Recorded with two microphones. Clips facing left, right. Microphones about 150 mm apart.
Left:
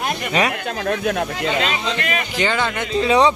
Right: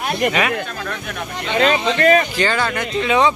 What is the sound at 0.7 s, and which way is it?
Speech, 65° left (ahead or behind).